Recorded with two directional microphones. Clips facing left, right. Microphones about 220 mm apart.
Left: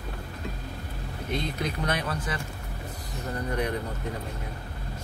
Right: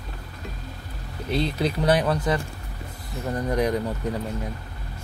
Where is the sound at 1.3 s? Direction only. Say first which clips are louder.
Right 7 dB; 35° right (ahead or behind).